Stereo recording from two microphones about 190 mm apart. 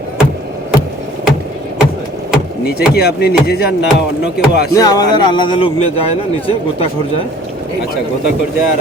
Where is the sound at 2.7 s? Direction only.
55° left (ahead or behind).